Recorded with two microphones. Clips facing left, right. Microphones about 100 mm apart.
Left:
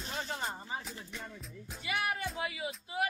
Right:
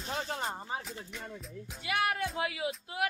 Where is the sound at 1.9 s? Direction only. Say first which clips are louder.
Right 4 dB; 70° right (ahead or behind).